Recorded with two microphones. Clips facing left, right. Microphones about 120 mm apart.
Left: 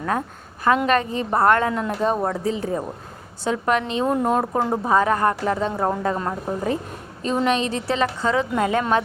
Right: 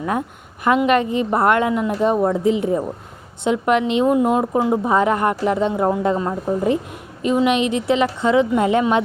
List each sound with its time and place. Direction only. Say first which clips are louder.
0.0 s a woman's voice: right 2 dB; 15° right (ahead or behind)
4.1 s a woman's voice: right 4 dB; 10° right (ahead or behind)
4.9 s a woman's voice: right 1 dB; 20° right (ahead or behind)